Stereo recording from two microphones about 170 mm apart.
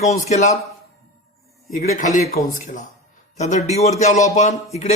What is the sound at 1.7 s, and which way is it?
Speech, 55° left (ahead or behind).